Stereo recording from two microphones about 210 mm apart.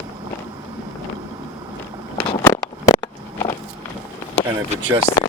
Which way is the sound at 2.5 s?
15° left (ahead or behind).